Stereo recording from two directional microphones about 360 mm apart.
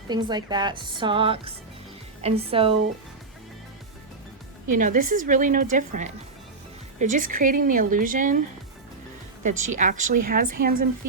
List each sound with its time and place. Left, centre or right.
0.1 s a woman's voice: centre
4.7 s a woman's voice: right
9.4 s a woman's voice: centre